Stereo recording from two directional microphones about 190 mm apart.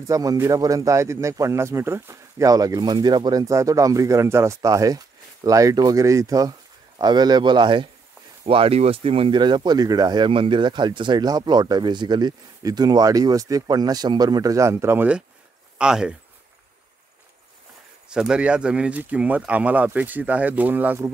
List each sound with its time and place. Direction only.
0.1 s a man's voice: 20° right (ahead or behind)
18.1 s a man's voice: 5° right (ahead or behind)